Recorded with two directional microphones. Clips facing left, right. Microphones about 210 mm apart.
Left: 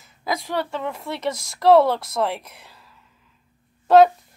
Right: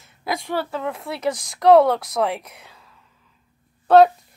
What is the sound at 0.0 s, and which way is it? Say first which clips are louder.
A woman's voice: even; centre (ahead or behind).